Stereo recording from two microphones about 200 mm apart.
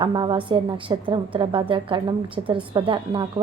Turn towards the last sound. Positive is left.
turn(degrees=-25)  # may be behind; listen again after turning